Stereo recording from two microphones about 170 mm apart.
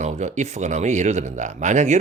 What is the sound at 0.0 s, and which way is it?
Speech, 40° right (ahead or behind).